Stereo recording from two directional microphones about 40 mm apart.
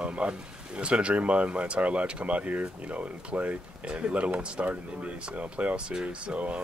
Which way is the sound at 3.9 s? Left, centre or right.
Right.